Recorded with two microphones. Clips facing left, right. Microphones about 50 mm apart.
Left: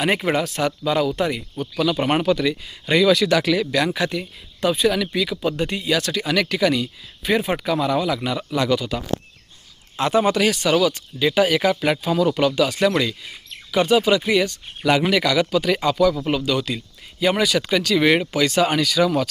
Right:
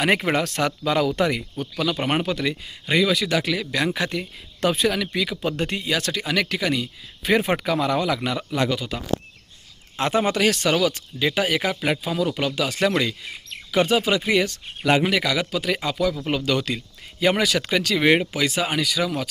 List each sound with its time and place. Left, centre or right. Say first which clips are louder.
0.6 s speech: left 1 dB; right
1.8 s speech: left 3 dB; centre
2.8 s speech: left 4 dB; centre
3.9 s speech: left 2 dB; right
7.2 s speech: even; right
8.4 s speech: left 1 dB; right
8.7 s speech: left 6 dB; centre
10.0 s speech: left 2 dB; right
11.8 s speech: left 4 dB; centre
12.6 s speech: left 2 dB; right
16.5 s speech: left 1 dB; right
16.7 s speech: left 1 dB; right
18.2 s speech: left 4 dB; centre